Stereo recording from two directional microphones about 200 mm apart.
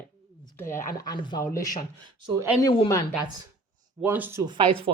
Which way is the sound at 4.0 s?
10° right (ahead or behind).